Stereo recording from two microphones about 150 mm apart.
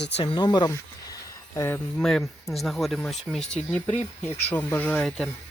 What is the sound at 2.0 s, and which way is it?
Speech, 5° left (ahead or behind).